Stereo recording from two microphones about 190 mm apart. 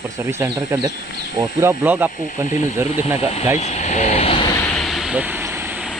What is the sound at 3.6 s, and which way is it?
Vehicle, 35° left (ahead or behind).